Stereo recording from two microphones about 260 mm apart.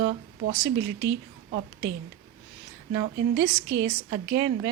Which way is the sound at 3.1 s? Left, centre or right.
Right.